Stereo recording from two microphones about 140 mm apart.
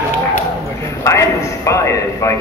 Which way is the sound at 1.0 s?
20° left (ahead or behind).